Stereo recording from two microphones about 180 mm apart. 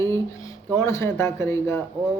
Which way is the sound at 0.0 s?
20° left (ahead or behind).